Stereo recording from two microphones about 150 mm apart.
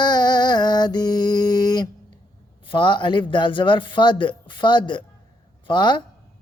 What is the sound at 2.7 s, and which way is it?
Speech, 30° left (ahead or behind).